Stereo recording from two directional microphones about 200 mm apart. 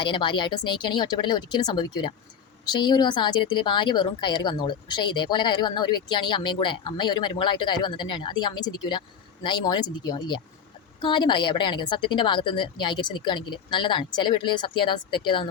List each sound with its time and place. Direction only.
0.0 s a woman's voice: 25° left (ahead or behind)